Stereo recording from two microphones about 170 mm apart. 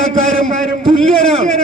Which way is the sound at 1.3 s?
40° right (ahead or behind).